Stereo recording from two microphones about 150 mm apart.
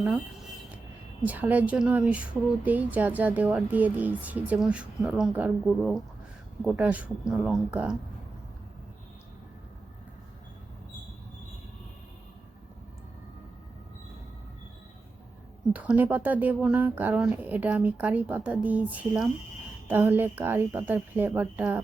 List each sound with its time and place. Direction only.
1.3 s speech: 10° right (ahead or behind)
15.7 s speech: 10° right (ahead or behind)